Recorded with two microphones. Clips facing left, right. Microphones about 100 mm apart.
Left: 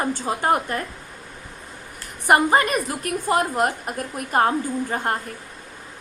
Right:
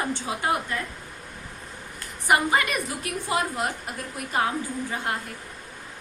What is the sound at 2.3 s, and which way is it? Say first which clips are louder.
A woman's voice: left 5 dB; 45° left (ahead or behind).